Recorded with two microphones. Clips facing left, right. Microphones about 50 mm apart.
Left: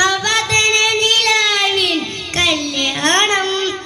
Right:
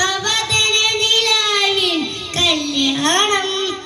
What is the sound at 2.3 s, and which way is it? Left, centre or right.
Carnatic music, left.